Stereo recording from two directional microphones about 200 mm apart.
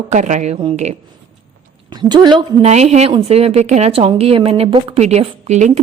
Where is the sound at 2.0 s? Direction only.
20° right (ahead or behind).